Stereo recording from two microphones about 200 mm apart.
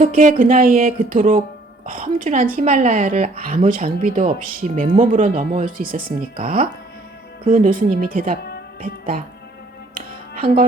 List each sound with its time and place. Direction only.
0.0 s speech: 40° right (ahead or behind)
10.4 s speech: 50° right (ahead or behind)